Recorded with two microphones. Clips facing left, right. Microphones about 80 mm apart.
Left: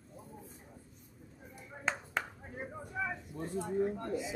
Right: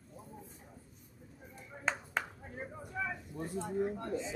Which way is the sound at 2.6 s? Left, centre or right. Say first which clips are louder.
Left 1 dB; centre.